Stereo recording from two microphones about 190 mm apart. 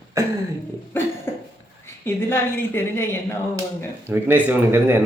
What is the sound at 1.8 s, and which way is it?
A woman's voice, 10° left (ahead or behind).